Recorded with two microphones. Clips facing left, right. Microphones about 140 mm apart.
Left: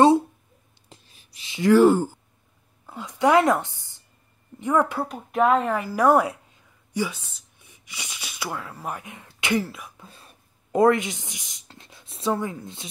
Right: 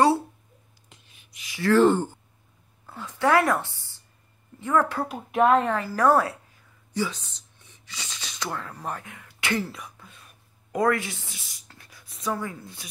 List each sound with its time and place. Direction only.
0.8 s a woman's voice: 35° left (ahead or behind); by 5.0 s 15° left (ahead or behind)
5.0 s speech: 5° right (ahead or behind)
5.8 s a woman's voice: 15° left (ahead or behind)
9.7 s speech: centre (ahead or behind)
10.0 s speech: 30° left (ahead or behind)